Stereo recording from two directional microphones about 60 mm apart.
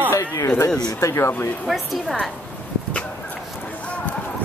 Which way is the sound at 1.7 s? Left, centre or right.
Centre.